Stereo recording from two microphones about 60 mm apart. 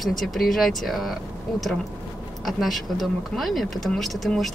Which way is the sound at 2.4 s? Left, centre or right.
Centre.